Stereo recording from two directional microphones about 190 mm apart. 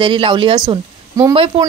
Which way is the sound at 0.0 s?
25° right (ahead or behind).